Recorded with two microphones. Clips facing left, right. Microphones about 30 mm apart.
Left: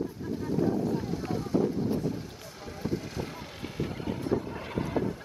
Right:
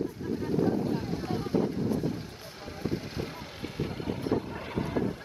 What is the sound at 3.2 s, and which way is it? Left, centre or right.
Vehicle, centre.